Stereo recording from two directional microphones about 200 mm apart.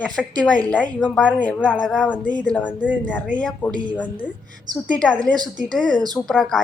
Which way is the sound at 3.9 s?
5° left (ahead or behind).